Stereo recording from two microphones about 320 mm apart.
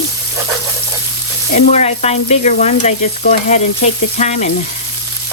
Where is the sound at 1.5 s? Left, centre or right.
Left.